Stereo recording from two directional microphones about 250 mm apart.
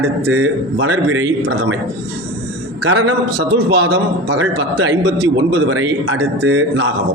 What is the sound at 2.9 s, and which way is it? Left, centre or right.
A man's voice, right.